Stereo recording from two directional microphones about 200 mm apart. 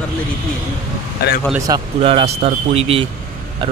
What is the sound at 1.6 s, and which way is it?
Speech, 25° right (ahead or behind).